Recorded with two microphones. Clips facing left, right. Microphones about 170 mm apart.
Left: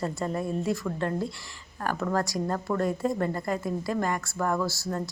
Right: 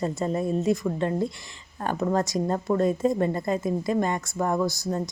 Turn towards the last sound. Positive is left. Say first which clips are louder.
# right 4 dB
turn(degrees=-15)  # may be behind; listen again after turning